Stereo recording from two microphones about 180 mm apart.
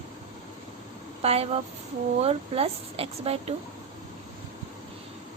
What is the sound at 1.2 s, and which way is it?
A woman's voice, 35° right (ahead or behind).